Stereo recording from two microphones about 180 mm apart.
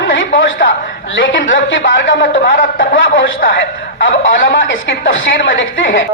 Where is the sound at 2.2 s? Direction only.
55° left (ahead or behind).